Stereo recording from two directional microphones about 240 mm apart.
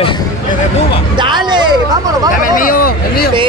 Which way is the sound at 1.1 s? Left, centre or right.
Centre.